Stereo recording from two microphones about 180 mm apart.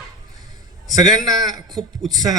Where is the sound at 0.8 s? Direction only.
20° right (ahead or behind).